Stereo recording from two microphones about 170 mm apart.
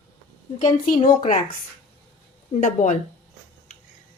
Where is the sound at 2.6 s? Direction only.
50° left (ahead or behind).